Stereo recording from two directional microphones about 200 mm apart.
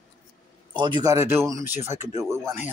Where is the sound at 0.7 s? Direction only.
20° right (ahead or behind).